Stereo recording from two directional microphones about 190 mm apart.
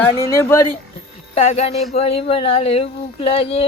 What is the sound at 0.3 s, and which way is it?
Speech, 15° left (ahead or behind).